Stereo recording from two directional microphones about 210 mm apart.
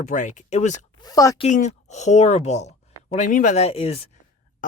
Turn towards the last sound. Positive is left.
turn(degrees=30)  # may be behind; listen again after turning